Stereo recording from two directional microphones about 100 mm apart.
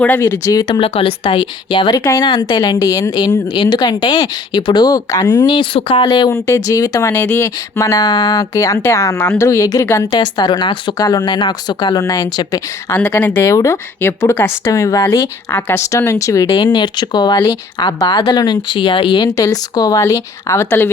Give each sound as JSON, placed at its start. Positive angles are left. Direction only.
{"t": 0.2, "sound": "speech", "side_deg": 30}
{"t": 0.7, "sound": "speech", "side_deg": 65}
{"t": 5.5, "sound": "speech", "side_deg": 65}
{"t": 6.3, "sound": "speech", "side_deg": 30}
{"t": 7.1, "sound": "speech", "side_deg": 20}
{"t": 10.1, "sound": "speech", "side_deg": 45}
{"t": 12.9, "sound": "speech", "side_deg": 20}
{"t": 14.7, "sound": "speech", "side_deg": 35}
{"t": 15.5, "sound": "speech", "side_deg": 25}
{"t": 19.4, "sound": "speech", "side_deg": 40}